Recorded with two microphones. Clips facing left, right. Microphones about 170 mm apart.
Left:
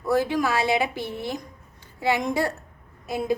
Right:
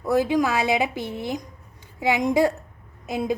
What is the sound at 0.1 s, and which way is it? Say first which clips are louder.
A woman's voice: right 2 dB; 20° right (ahead or behind).